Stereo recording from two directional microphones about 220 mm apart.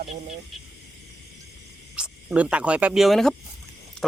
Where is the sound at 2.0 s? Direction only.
5° right (ahead or behind).